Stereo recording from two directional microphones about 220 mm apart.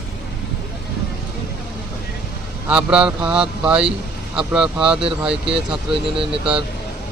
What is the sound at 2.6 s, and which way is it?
Speech, 5° right (ahead or behind).